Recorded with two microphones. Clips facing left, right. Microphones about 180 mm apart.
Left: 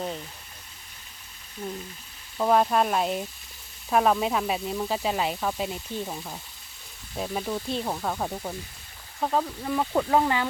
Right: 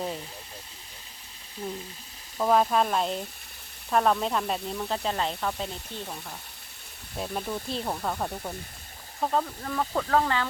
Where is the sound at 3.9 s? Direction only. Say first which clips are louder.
Left 2 dB; 5° left (ahead or behind).